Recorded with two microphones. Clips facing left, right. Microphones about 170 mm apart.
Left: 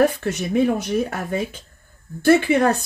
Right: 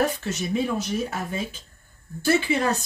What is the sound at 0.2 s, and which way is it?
A woman's voice, 55° left (ahead or behind).